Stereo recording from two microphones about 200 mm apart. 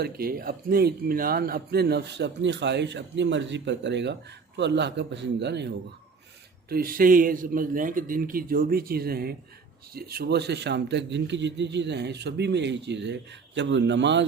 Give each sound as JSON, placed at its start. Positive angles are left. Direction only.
{"t": 0.0, "sound": "a man's voice", "side_deg": -50}